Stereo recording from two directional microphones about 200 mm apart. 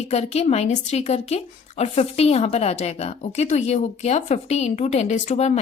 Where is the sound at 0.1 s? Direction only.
35° left (ahead or behind).